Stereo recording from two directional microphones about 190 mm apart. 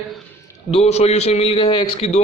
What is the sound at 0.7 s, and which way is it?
A man's voice, 35° left (ahead or behind).